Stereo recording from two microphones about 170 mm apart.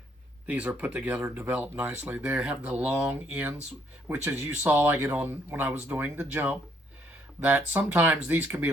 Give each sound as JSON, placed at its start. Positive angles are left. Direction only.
{"t": 0.4, "sound": "speech", "side_deg": -10}